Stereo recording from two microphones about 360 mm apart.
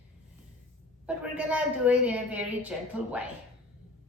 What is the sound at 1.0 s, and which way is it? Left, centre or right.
A woman's voice, centre.